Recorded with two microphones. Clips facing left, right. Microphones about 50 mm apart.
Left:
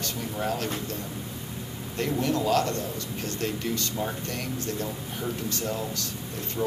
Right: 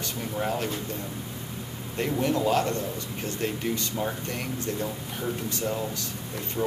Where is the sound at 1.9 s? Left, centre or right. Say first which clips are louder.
Right 1 dB; centre.